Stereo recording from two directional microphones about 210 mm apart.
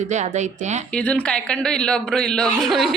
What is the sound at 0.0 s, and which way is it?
Speech, 35° right (ahead or behind).